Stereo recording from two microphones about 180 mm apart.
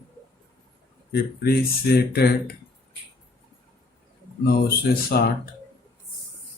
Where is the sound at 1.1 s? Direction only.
60° left (ahead or behind).